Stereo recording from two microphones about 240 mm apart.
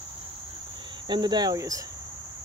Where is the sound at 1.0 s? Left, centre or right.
Centre.